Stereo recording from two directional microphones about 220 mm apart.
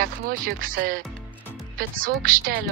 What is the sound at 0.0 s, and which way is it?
Speech, 40° right (ahead or behind).